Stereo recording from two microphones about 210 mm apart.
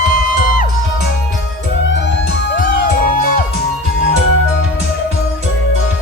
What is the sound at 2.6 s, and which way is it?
Music, 45° left (ahead or behind).